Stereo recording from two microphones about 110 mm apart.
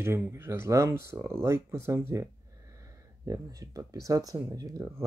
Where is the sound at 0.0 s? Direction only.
25° right (ahead or behind).